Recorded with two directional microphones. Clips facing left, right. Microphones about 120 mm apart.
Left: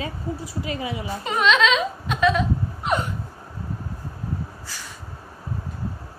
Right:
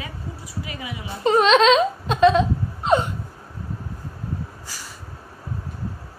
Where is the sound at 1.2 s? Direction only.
35° right (ahead or behind).